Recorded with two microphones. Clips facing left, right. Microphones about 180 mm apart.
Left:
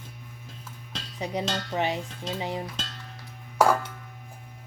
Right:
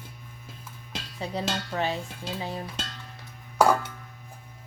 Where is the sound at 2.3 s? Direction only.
20° left (ahead or behind).